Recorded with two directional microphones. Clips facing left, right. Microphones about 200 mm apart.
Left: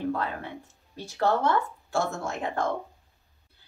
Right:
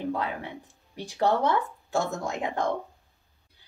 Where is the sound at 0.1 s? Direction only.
15° right (ahead or behind).